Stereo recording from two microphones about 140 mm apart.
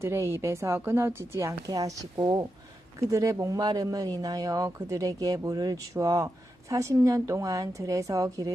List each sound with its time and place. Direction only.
0.0 s speech: 20° right (ahead or behind)